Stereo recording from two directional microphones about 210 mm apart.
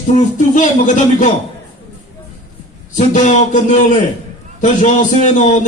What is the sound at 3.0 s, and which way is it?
A man's voice, 35° left (ahead or behind).